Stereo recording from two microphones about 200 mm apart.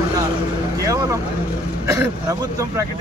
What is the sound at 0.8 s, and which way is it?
Speech, 15° right (ahead or behind).